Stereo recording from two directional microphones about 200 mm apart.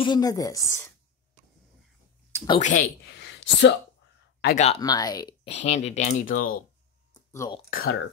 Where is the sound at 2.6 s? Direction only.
40° left (ahead or behind).